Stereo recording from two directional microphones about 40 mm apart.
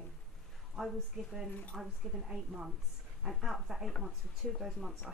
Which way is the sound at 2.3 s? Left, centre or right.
Centre.